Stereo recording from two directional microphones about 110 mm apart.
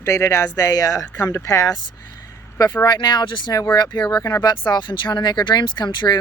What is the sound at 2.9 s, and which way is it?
Speech, 40° left (ahead or behind).